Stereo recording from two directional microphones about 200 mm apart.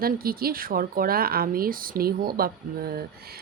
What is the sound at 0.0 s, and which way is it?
Speech, 45° right (ahead or behind).